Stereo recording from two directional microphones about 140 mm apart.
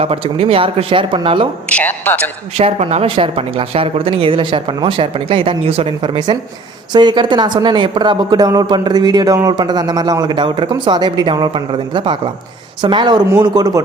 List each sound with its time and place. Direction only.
0.0 s speech: 45° right (ahead or behind)
1.7 s a man's voice: 10° left (ahead or behind)
2.6 s speech: 45° right (ahead or behind); by 13.8 s 30° right (ahead or behind)